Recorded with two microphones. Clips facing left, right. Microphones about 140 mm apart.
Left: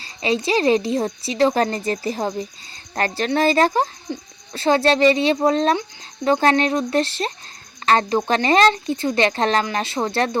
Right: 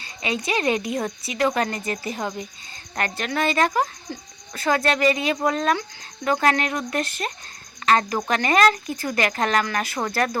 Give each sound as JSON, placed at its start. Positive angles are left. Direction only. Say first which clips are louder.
{"t": 0.0, "sound": "a woman's voice", "louder": "left 6 dB", "side_deg": 30}